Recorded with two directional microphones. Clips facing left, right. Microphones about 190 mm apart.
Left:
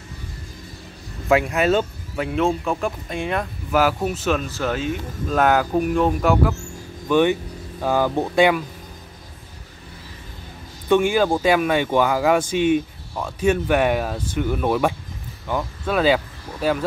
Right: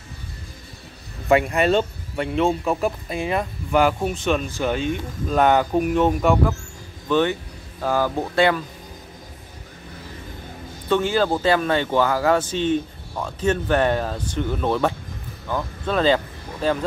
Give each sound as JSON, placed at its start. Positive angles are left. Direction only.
{"t": 1.3, "sound": "speech", "side_deg": 0}
{"t": 7.1, "sound": "speech", "side_deg": 15}
{"t": 10.9, "sound": "speech", "side_deg": 15}